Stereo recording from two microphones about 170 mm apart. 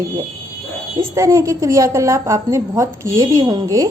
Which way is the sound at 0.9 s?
20° right (ahead or behind).